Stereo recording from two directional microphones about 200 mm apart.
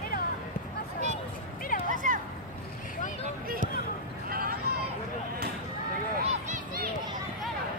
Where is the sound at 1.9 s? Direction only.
40° right (ahead or behind).